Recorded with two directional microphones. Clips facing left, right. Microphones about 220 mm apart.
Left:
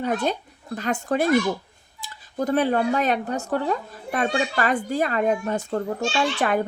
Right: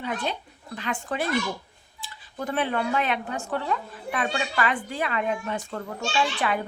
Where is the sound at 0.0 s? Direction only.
45° left (ahead or behind).